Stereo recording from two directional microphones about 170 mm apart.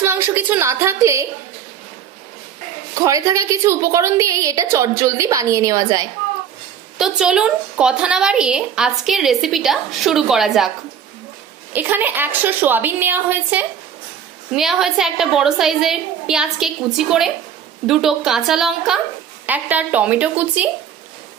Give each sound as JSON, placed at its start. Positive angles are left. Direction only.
{"t": 0.0, "sound": "a woman's voice", "side_deg": -15}
{"t": 3.1, "sound": "a woman's voice", "side_deg": -20}
{"t": 7.0, "sound": "a woman's voice", "side_deg": -5}
{"t": 11.7, "sound": "a woman's voice", "side_deg": -10}